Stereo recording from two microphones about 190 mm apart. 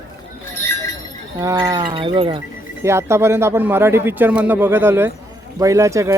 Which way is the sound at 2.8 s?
15° right (ahead or behind).